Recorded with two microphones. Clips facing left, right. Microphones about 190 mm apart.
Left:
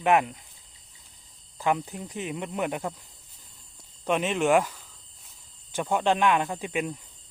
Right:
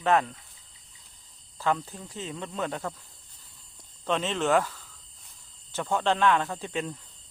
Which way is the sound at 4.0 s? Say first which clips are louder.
Left 3 dB; 15° left (ahead or behind).